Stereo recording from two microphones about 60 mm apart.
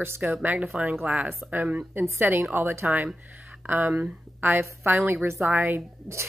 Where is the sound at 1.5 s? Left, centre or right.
Right.